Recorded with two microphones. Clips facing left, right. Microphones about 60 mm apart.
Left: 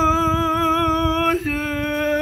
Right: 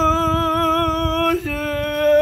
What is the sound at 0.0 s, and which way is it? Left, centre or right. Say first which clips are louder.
Music: right 1 dB; left.